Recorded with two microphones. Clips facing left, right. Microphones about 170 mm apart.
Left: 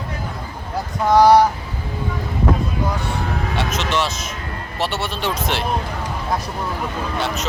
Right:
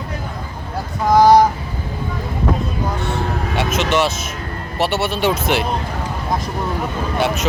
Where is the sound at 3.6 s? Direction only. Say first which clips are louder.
Right 5 dB; 60° right (ahead or behind).